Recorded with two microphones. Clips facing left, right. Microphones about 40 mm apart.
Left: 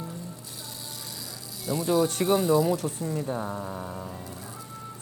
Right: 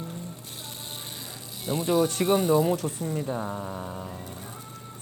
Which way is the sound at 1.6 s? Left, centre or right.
Right.